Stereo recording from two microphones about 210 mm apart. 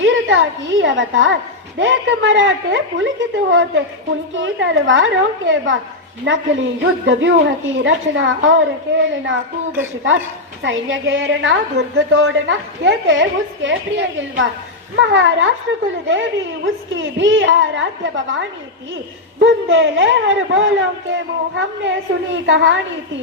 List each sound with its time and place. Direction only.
0.0 s a woman's voice: 65° right (ahead or behind)
10.6 s a woman's voice: 65° right (ahead or behind)
16.9 s a woman's voice: 65° right (ahead or behind)